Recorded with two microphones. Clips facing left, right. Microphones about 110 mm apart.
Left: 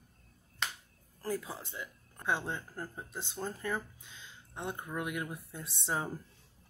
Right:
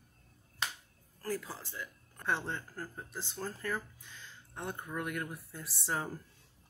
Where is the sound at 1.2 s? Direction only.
20° left (ahead or behind).